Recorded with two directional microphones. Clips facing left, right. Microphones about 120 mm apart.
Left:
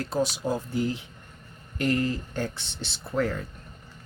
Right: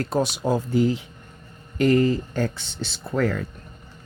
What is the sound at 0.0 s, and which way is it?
Speech, 60° right (ahead or behind).